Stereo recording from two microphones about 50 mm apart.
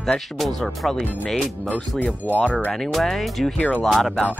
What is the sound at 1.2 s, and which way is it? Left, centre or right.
Speech, left.